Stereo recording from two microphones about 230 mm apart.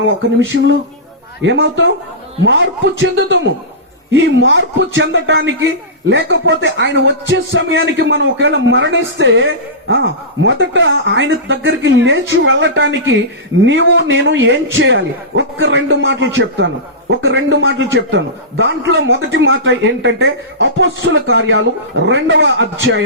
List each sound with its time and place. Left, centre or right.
0.3 s a man's voice: right